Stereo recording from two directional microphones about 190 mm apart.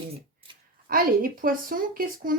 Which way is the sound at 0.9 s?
50° right (ahead or behind).